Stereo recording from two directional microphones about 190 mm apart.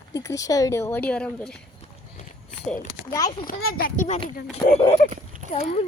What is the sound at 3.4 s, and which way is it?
A child's voice, 50° left (ahead or behind).